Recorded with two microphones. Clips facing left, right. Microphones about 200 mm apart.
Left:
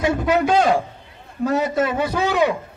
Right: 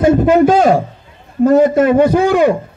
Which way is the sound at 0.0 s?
50° right (ahead or behind).